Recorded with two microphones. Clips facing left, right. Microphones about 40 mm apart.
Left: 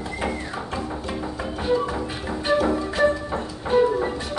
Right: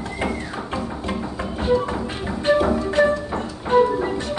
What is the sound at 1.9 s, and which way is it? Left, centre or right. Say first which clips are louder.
Music: right 2 dB; centre.